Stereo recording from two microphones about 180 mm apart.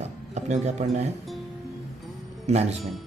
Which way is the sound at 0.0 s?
40° right (ahead or behind).